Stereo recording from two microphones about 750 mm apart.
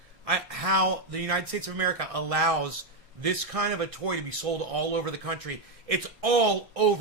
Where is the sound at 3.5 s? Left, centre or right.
Right.